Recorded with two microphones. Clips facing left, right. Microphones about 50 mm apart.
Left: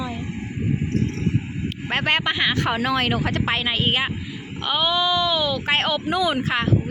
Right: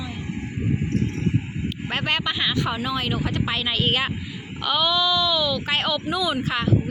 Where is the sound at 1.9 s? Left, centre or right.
Left.